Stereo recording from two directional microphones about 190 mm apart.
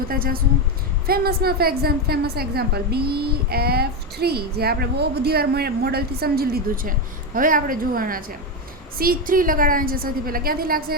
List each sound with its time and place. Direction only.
0.1 s a woman's voice: 50° right (ahead or behind)